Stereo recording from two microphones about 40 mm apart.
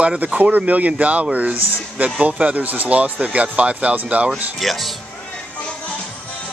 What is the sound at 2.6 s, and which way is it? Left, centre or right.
Speech, right.